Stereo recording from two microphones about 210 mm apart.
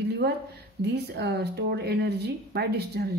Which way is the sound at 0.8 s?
50° right (ahead or behind).